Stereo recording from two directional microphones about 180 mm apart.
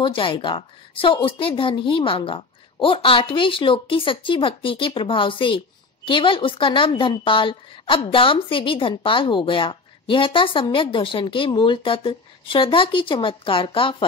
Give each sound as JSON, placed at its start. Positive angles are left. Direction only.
{"t": 0.0, "sound": "a woman's voice", "side_deg": 30}